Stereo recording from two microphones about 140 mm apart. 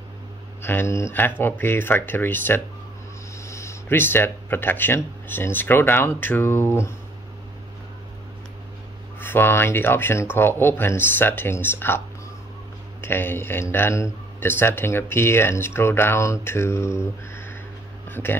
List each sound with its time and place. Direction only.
0.6 s a man's voice: 15° left (ahead or behind)
9.2 s a man's voice: 15° left (ahead or behind)
13.0 s a man's voice: 15° left (ahead or behind)
18.0 s a sound: 15° left (ahead or behind)